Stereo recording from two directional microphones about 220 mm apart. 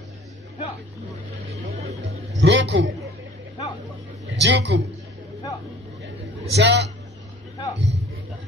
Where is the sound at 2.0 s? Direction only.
55° right (ahead or behind).